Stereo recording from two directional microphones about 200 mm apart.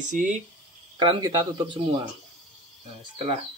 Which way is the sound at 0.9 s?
20° right (ahead or behind).